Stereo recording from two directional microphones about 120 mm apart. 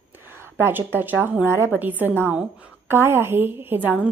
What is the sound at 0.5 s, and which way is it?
A woman's voice, 20° right (ahead or behind).